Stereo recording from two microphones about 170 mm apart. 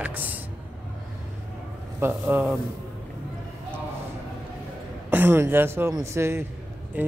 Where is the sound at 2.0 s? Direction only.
10° right (ahead or behind).